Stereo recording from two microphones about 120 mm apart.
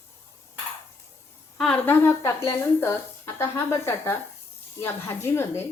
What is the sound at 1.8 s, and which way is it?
A woman's voice, 20° left (ahead or behind).